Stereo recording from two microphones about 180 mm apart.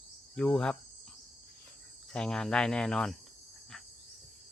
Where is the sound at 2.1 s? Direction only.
5° left (ahead or behind).